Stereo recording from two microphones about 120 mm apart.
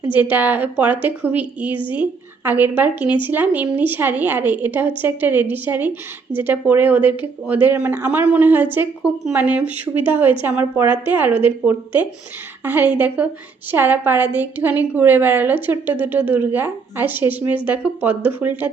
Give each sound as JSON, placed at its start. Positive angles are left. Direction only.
{"t": 0.1, "sound": "a woman's voice", "side_deg": -15}